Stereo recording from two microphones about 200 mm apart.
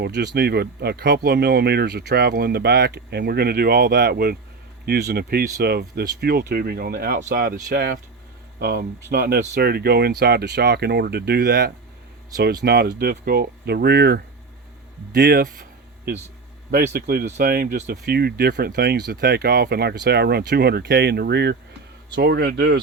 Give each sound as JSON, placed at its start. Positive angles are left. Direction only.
{"t": 0.0, "sound": "speech", "side_deg": -55}
{"t": 16.7, "sound": "speech", "side_deg": -50}